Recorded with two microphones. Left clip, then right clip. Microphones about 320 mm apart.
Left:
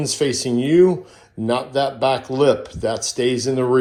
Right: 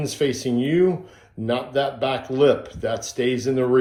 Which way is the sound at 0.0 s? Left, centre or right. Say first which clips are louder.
Left 3 dB; centre.